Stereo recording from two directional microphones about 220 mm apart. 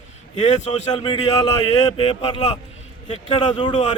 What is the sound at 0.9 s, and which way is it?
A man's voice, 20° left (ahead or behind).